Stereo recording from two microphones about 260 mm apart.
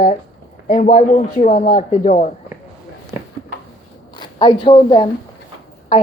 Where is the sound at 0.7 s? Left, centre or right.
Left.